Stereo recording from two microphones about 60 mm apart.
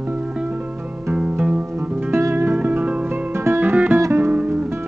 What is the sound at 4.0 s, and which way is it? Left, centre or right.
Music, right.